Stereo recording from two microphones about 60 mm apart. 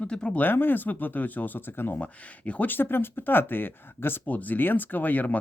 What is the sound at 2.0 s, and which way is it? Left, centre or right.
Speech, left.